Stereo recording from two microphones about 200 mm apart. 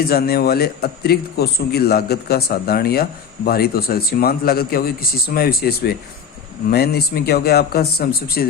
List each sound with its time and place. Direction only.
0.0 s a man's voice: 50° left (ahead or behind)